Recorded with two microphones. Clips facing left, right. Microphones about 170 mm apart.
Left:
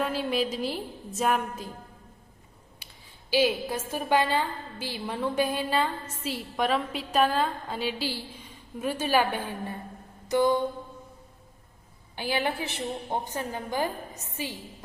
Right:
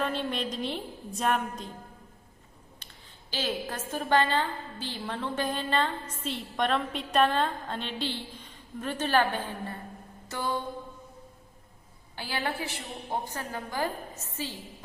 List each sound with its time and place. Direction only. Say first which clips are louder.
0.0 s a woman's voice: left 3 dB; 5° left (ahead or behind)
2.7 s a woman's voice: even; 10° left (ahead or behind)
12.1 s a woman's voice: left 4 dB; 15° left (ahead or behind)